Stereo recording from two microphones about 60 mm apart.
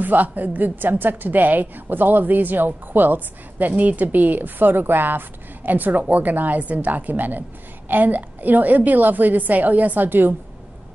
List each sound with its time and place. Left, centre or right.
0.0 s a woman's voice: right